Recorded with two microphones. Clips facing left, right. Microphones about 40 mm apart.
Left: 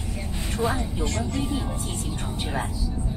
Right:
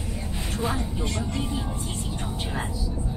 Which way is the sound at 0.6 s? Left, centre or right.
Centre.